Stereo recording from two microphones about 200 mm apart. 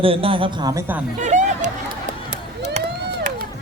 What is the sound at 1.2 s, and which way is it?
Hubbub, 35° right (ahead or behind).